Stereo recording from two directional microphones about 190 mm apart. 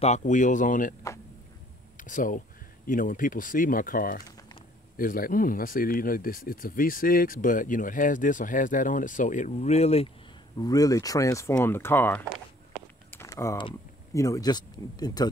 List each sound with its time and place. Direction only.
0.0 s speech: 40° left (ahead or behind)
2.0 s speech: 45° left (ahead or behind)
10.6 s speech: 20° left (ahead or behind)
13.1 s a sound: 15° left (ahead or behind)
13.6 s speech: 20° left (ahead or behind)